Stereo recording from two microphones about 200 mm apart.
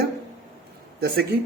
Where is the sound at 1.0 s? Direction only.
55° right (ahead or behind).